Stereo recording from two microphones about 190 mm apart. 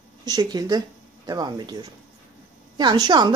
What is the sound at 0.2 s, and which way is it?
A woman's voice, 20° right (ahead or behind).